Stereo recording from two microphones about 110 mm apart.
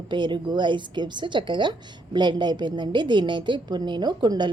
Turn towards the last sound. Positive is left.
turn(degrees=-40)  # may be behind; listen again after turning